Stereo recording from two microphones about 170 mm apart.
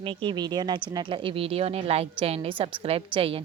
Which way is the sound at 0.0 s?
30° right (ahead or behind).